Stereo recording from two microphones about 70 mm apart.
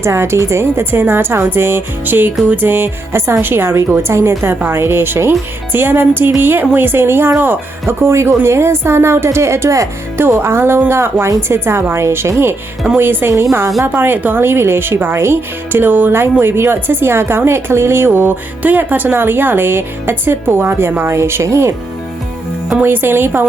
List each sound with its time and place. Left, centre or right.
0.0 s a woman's voice: right
10.2 s a woman's voice: right
22.8 s a woman's voice: right